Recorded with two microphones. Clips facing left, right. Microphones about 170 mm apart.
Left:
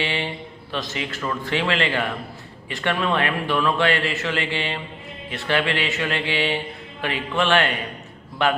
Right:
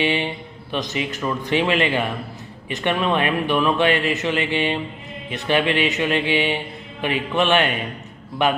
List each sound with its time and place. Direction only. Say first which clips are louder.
0.0 s a man's voice: right 5 dB; 15° right (ahead or behind)